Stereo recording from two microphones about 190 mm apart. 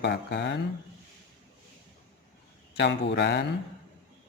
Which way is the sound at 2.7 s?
65° left (ahead or behind).